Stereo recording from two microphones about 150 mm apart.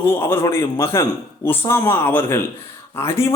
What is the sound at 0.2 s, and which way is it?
A man's voice, 15° left (ahead or behind).